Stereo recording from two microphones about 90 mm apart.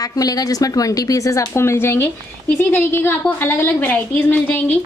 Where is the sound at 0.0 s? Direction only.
45° left (ahead or behind).